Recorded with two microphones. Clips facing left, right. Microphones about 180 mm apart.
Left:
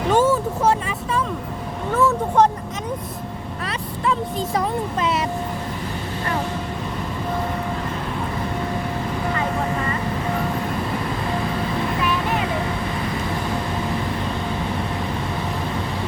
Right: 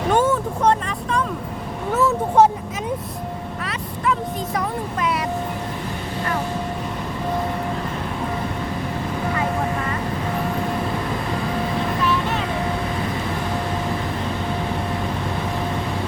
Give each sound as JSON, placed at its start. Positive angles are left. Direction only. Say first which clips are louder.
{"t": 0.1, "sound": "vehicle", "louder": "left 1 dB", "side_deg": 5}
{"t": 1.9, "sound": "speech", "louder": "even", "side_deg": -5}
{"t": 3.7, "sound": "speech", "louder": "even", "side_deg": 30}